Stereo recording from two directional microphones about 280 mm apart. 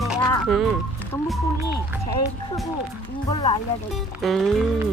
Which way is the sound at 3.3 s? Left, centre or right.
Centre.